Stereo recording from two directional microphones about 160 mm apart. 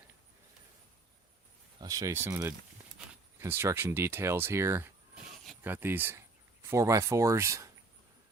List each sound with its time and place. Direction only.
1.8 s speech: 20° right (ahead or behind)